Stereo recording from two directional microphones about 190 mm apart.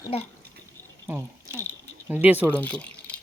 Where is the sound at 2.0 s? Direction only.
10° right (ahead or behind).